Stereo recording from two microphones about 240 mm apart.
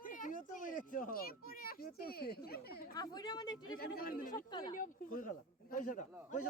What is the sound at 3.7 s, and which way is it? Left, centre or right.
Speech, left.